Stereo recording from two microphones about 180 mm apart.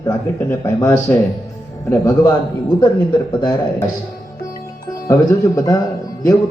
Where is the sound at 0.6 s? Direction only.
15° left (ahead or behind).